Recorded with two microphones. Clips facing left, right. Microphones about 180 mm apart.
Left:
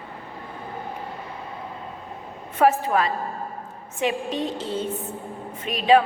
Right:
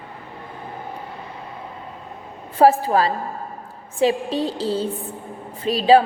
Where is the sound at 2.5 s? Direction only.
35° right (ahead or behind).